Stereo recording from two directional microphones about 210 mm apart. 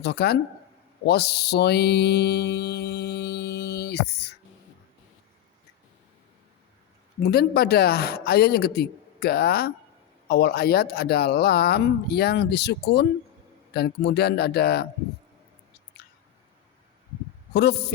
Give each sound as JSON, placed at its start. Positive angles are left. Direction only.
{"t": 0.0, "sound": "mantra", "side_deg": 50}
{"t": 7.3, "sound": "mantra", "side_deg": 50}
{"t": 17.5, "sound": "a man's voice", "side_deg": 55}